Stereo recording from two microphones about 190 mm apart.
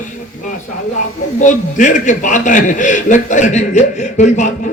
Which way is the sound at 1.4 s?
40° left (ahead or behind).